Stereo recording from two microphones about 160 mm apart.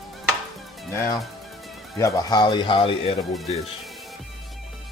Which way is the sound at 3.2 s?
Centre (ahead or behind).